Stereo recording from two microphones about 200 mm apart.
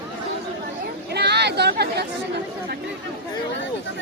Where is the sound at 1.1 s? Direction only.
55° right (ahead or behind).